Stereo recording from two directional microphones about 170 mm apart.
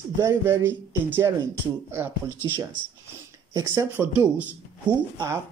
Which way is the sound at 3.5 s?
20° right (ahead or behind).